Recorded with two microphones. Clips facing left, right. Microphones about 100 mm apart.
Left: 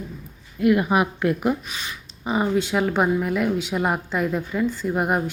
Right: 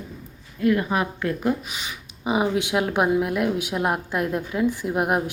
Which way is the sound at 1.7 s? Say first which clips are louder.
Left 1 dB; 15° right (ahead or behind).